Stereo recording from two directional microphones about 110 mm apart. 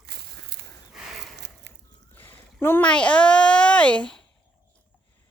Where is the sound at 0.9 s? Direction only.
5° right (ahead or behind).